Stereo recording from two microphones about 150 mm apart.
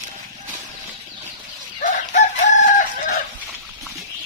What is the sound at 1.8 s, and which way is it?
Chicken, 60° left (ahead or behind).